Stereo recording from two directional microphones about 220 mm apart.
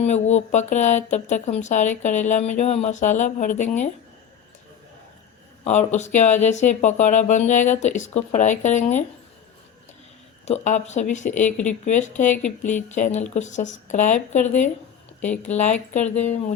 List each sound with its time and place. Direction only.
0.0 s speech: 30° left (ahead or behind)
5.6 s speech: 30° left (ahead or behind)
10.4 s speech: 30° left (ahead or behind)